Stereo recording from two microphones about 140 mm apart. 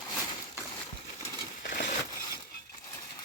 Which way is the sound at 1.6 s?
90° left.